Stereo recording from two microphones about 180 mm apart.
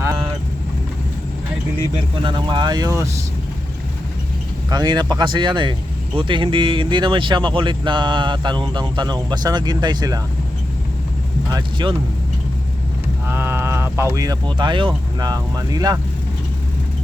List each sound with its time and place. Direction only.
2.2 s speech: 25° right (ahead or behind)
4.7 s speech: 20° right (ahead or behind)
11.5 s speech: 25° right (ahead or behind)
13.2 s speech: 10° right (ahead or behind)